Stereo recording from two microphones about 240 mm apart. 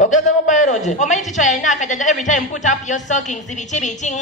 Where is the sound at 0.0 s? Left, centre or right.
Left.